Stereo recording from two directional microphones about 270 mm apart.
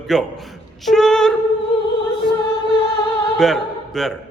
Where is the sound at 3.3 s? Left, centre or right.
Centre.